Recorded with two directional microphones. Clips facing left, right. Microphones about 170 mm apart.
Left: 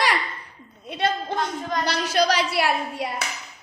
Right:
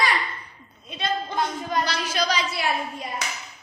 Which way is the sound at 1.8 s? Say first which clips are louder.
Left 4 dB; 60° left (ahead or behind).